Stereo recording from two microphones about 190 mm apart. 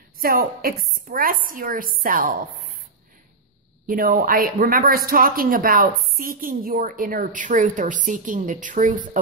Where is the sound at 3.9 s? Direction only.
50° right (ahead or behind).